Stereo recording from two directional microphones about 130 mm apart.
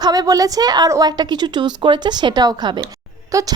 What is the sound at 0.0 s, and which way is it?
Speech, 30° right (ahead or behind).